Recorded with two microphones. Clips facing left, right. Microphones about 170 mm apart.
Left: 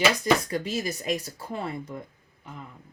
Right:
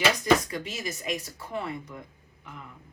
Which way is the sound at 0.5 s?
35° left (ahead or behind).